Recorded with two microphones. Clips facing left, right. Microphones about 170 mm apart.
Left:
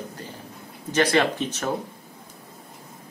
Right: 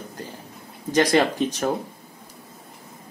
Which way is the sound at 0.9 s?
35° right (ahead or behind).